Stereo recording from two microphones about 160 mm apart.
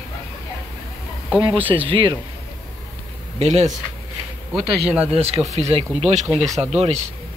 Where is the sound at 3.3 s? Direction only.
40° right (ahead or behind).